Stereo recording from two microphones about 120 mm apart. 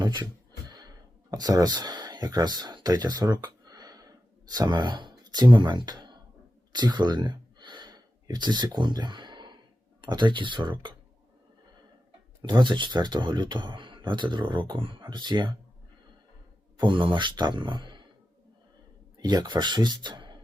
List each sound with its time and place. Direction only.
0.0 s a sound: 35° right (ahead or behind)
4.5 s speech: 35° right (ahead or behind)
6.7 s a sound: 35° right (ahead or behind)
10.0 s speech: 40° right (ahead or behind)
12.4 s speech: 40° right (ahead or behind)
16.8 s speech: 45° right (ahead or behind)
19.2 s speech: 35° right (ahead or behind)